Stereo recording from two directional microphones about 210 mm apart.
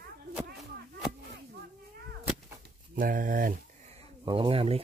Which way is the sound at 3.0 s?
40° right (ahead or behind).